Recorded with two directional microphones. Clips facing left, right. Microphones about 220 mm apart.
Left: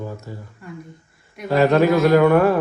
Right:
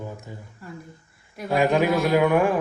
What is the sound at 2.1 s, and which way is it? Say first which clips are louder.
Speech: left 3 dB; 10° right (ahead or behind).